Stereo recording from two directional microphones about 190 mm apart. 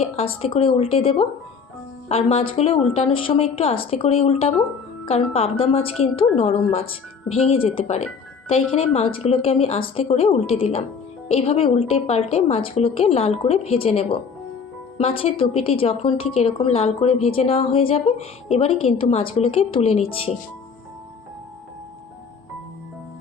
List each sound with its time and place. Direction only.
0.0 s a woman's voice: 30° left (ahead or behind)